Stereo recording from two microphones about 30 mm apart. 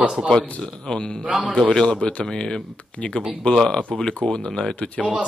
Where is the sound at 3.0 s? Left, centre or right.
Left.